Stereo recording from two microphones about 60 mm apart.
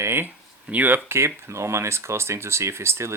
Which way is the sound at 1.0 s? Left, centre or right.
Right.